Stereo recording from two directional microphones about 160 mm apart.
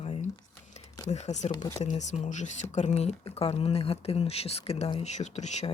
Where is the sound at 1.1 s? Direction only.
45° left (ahead or behind).